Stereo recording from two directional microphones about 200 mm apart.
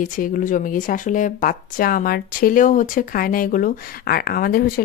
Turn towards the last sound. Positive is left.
turn(degrees=45)  # may be behind; listen again after turning